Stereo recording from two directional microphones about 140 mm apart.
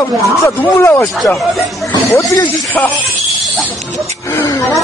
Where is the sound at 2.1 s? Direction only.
25° left (ahead or behind).